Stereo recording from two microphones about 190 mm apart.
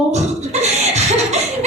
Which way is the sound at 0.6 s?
35° right (ahead or behind).